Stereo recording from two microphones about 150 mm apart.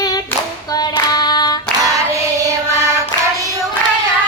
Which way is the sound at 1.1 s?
25° left (ahead or behind).